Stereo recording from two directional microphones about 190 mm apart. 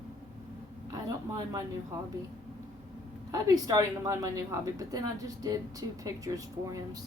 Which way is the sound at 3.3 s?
20° right (ahead or behind).